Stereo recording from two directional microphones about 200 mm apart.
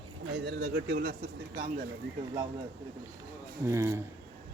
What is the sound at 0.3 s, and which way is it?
Speech, 60° right (ahead or behind).